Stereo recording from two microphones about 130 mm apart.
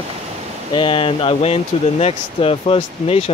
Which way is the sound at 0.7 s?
40° left (ahead or behind).